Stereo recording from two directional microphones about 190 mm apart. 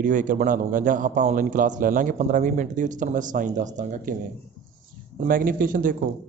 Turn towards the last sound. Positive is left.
turn(degrees=-45)  # may be behind; listen again after turning